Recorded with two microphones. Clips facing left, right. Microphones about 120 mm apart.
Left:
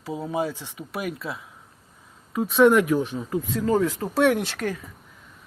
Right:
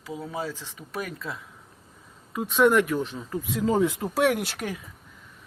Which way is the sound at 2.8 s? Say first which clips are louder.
Left 5 dB; 15° left (ahead or behind).